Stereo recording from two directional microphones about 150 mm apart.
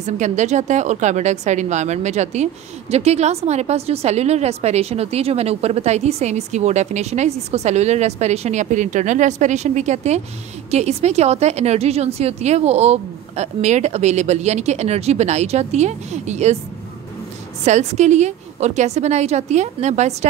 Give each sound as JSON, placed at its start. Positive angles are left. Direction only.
{"t": 0.0, "sound": "a woman's voice", "side_deg": -50}
{"t": 17.6, "sound": "a woman's voice", "side_deg": -50}